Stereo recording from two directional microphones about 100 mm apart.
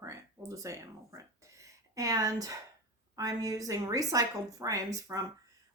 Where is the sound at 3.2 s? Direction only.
35° right (ahead or behind).